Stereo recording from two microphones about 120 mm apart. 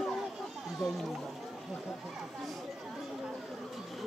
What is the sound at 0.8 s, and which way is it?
Speech, centre (ahead or behind).